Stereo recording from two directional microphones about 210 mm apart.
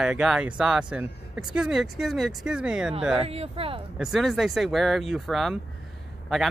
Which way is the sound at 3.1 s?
30° right (ahead or behind).